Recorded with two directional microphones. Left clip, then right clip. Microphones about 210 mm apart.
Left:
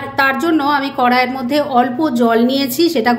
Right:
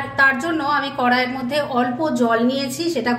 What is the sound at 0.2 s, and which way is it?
A woman's voice, 40° left (ahead or behind).